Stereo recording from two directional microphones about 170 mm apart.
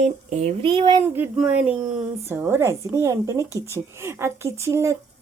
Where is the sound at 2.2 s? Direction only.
15° right (ahead or behind).